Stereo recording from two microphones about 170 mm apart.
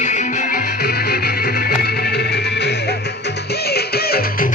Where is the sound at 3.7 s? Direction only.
65° left (ahead or behind).